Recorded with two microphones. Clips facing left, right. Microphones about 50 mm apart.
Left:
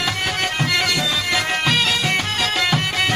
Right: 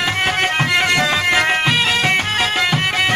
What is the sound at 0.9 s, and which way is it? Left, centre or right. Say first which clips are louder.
Music: right 5 dB; right.